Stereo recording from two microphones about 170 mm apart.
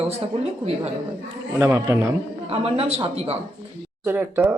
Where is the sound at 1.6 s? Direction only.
15° right (ahead or behind).